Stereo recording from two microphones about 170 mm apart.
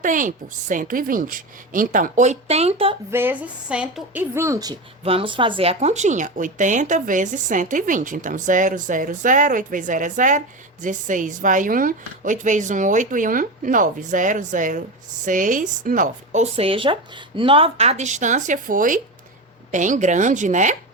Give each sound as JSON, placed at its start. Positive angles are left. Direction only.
{"t": 0.0, "sound": "a woman's voice", "side_deg": -50}
{"t": 3.1, "sound": "a woman's voice", "side_deg": -10}
{"t": 5.0, "sound": "a woman's voice", "side_deg": -30}